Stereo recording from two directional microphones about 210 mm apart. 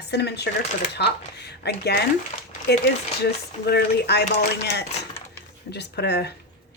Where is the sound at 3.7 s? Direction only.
50° left (ahead or behind).